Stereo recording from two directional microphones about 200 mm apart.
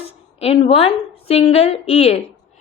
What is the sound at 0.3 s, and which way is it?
A woman's voice, 30° left (ahead or behind).